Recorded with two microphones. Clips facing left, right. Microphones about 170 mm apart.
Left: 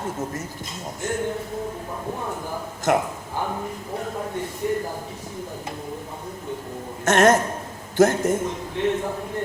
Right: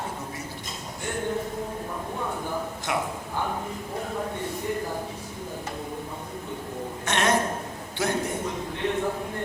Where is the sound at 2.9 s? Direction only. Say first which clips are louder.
Left 9 dB; 45° left (ahead or behind).